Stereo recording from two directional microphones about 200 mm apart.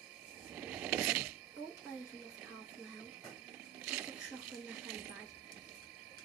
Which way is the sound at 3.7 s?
5° right (ahead or behind).